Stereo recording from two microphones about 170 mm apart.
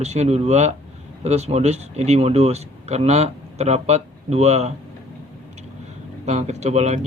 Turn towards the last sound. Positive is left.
turn(degrees=-40)  # may be behind; listen again after turning